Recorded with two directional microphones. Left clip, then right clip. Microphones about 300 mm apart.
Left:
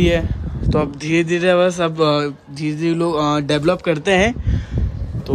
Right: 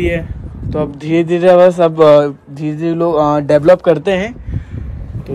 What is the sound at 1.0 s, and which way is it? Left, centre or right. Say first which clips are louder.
Speech: right 9 dB; centre.